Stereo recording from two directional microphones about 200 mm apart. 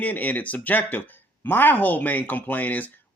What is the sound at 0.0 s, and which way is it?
Speech, 10° left (ahead or behind).